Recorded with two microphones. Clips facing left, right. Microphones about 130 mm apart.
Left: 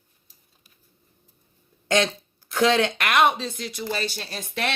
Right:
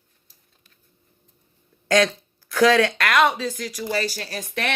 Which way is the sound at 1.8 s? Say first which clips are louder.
Right 3 dB; 25° left (ahead or behind).